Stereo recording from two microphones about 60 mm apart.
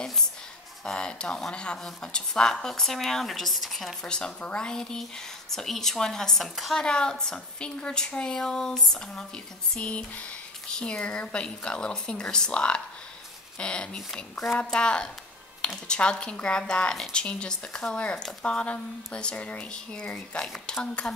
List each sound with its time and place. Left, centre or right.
0.8 s speech: centre
4.0 s speech: centre
6.8 s speech: centre
9.8 s a sound: left
10.7 s speech: centre